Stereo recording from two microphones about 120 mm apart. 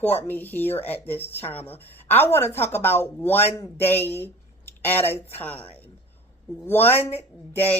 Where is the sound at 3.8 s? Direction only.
20° left (ahead or behind).